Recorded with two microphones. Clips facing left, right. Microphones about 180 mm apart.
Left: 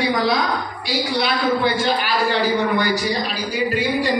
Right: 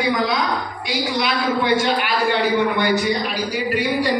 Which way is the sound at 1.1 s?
35° left (ahead or behind).